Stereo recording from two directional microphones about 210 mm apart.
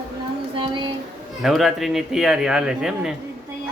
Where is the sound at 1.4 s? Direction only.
Centre (ahead or behind).